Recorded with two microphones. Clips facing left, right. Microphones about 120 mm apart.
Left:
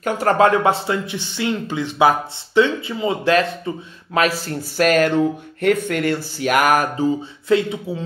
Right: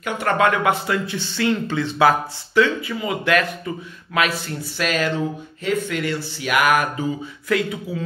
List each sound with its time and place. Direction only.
0.0 s speech: 40° left (ahead or behind)
7.4 s speech: 25° left (ahead or behind)